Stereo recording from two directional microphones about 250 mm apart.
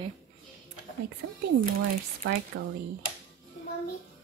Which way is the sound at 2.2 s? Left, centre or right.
Right.